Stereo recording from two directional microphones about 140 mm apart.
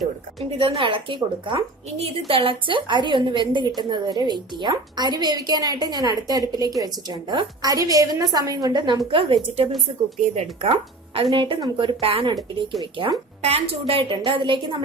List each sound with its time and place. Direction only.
0.3 s a woman's voice: 40° right (ahead or behind)
13.4 s a woman's voice: 45° right (ahead or behind)